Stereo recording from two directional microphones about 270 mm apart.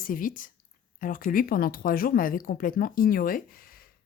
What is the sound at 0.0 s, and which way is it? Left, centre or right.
Speech, left.